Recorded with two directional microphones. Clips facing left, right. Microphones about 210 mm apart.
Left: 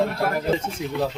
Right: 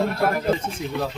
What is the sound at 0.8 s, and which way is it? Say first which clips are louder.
Speech: left 2 dB; 15° left (ahead or behind).